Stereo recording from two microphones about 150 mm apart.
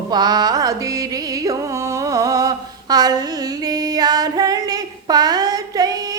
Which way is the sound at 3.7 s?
25° right (ahead or behind).